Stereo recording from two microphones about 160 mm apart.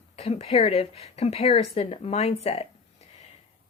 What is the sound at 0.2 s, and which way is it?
Speech, 40° left (ahead or behind).